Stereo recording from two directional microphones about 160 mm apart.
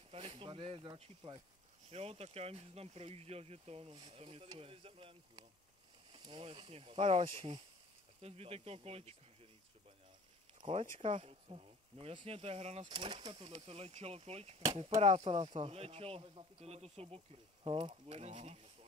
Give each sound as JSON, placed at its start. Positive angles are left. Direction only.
{"t": 0.1, "sound": "speech", "side_deg": -35}
{"t": 10.6, "sound": "speech", "side_deg": -35}
{"t": 12.8, "sound": "speech", "side_deg": -30}